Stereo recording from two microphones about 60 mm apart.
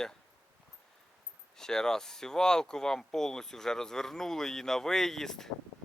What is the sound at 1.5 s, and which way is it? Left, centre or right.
Speech, centre.